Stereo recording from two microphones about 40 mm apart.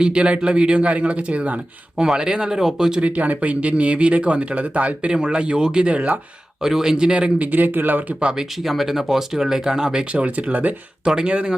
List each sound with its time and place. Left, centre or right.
0.0 s speech: right
3.0 s speech: right
5.1 s speech: right
5.9 s speech: right
6.6 s speech: centre
7.3 s speech: right
8.2 s speech: right
8.6 s speech: centre
10.1 s speech: right
11.0 s speech: centre